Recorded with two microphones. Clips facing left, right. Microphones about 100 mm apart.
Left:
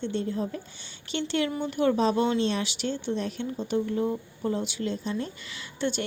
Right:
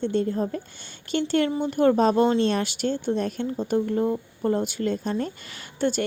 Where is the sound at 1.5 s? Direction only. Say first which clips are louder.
Right 5 dB; 35° right (ahead or behind).